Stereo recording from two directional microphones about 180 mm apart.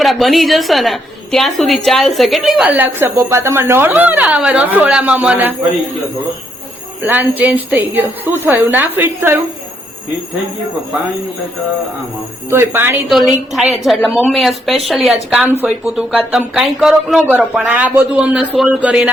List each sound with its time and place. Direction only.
0.0 s a woman's voice: centre (ahead or behind)
7.0 s speech: 10° right (ahead or behind)
12.5 s speech: 15° right (ahead or behind)
13.1 s a woman's voice: centre (ahead or behind)